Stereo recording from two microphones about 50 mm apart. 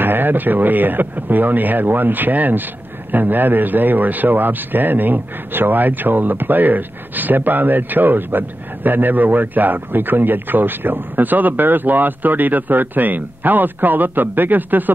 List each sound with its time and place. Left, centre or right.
0.0 s a man's voice: right